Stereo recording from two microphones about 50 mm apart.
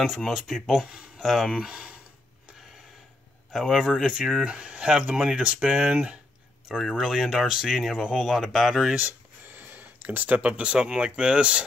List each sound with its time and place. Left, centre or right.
0.0 s speech: centre
1.5 s speech: centre
3.5 s speech: centre
4.0 s speech: right
6.7 s speech: centre
8.3 s speech: centre
9.5 s a sound: right
10.4 s speech: right